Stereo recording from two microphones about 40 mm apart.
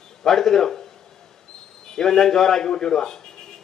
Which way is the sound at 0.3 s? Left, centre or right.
Centre.